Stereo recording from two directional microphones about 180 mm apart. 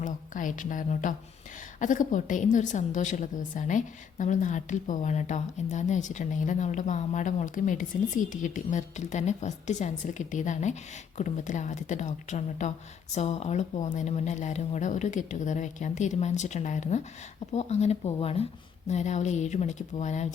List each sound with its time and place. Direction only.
0.0 s a woman's voice: 45° left (ahead or behind)